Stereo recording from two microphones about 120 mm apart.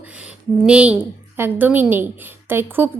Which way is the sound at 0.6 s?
10° right (ahead or behind).